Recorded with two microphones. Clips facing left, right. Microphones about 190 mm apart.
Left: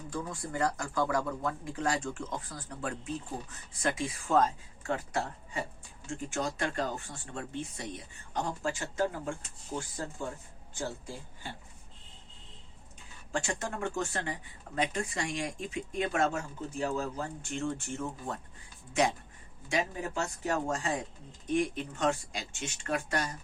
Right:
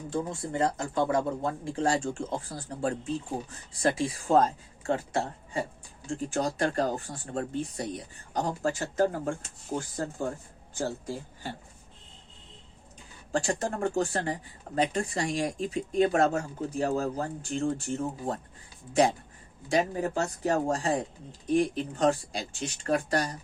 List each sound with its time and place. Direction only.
0.1 s speech: 25° right (ahead or behind)
13.3 s speech: 35° right (ahead or behind)